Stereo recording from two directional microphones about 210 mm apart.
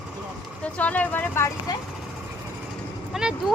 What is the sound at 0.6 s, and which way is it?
Speech, 5° left (ahead or behind).